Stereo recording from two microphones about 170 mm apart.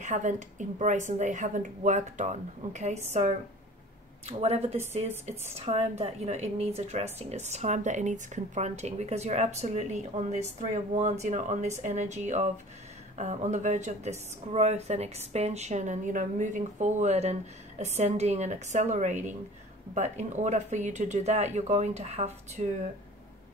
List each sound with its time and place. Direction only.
0.0 s a woman's voice: 45° right (ahead or behind)